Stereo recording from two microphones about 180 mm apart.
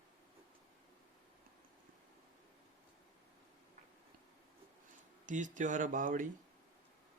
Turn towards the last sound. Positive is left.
turn(degrees=-50)  # may be behind; listen again after turning